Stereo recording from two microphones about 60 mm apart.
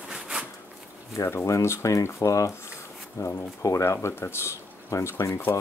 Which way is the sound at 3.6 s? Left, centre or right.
Left.